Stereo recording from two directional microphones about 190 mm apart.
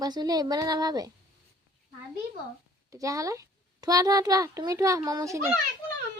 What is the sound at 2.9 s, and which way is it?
A child's voice, 15° right (ahead or behind).